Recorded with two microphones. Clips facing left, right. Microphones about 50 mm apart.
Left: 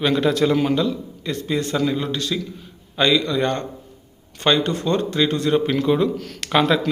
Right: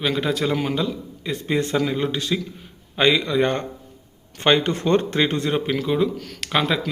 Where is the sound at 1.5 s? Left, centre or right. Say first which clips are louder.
Right 1 dB; right.